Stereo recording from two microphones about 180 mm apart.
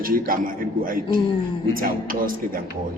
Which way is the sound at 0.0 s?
50° right (ahead or behind).